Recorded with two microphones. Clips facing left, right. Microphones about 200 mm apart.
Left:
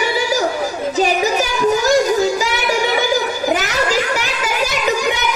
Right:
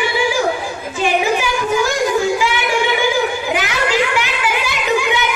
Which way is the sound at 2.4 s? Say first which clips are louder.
Right 1 dB; 40° left (ahead or behind).